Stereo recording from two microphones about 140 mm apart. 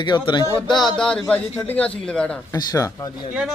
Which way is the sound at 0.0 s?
35° left (ahead or behind).